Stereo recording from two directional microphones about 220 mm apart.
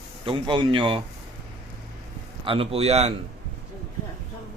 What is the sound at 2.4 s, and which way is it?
Speech, 25° right (ahead or behind).